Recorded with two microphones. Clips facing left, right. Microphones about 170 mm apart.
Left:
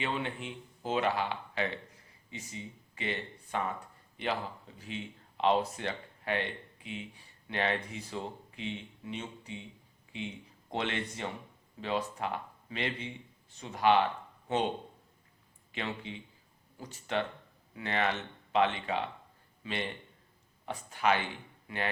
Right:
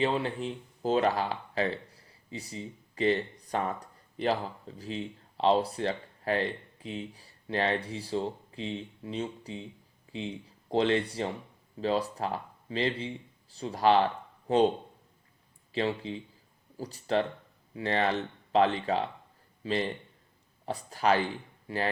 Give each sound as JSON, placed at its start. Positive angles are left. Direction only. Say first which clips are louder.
{"t": 0.0, "sound": "speech", "louder": "right 6 dB", "side_deg": -35}
{"t": 15.7, "sound": "speech", "louder": "right 8 dB", "side_deg": -35}